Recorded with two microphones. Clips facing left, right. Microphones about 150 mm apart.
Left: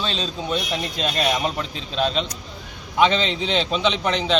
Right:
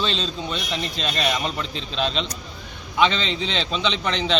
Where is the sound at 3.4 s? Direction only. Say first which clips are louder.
Left 3 dB; 15° left (ahead or behind).